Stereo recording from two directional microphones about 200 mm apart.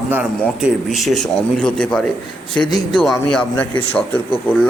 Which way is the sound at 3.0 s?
5° left (ahead or behind).